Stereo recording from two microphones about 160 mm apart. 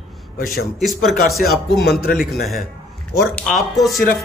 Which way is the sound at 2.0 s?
65° left (ahead or behind).